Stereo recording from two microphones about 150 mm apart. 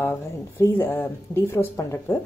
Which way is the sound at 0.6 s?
15° left (ahead or behind).